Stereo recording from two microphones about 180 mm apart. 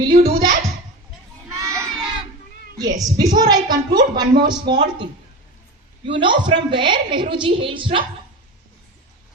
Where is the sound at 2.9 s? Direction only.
20° right (ahead or behind).